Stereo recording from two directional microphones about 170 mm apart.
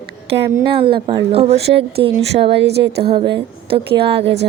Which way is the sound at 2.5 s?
85° right.